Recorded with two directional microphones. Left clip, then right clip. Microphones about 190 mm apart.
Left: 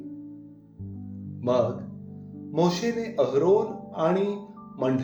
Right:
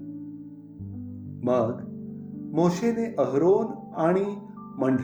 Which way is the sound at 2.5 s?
30° right (ahead or behind).